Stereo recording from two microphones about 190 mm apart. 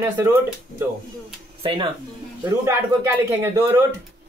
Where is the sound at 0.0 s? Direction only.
15° right (ahead or behind).